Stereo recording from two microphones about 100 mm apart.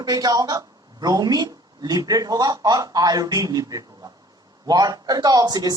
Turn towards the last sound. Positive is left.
turn(degrees=-40)  # may be behind; listen again after turning